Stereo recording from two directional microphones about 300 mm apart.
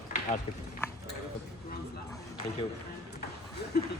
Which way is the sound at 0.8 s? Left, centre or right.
Centre.